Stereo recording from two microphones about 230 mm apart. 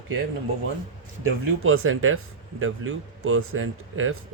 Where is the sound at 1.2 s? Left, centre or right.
Right.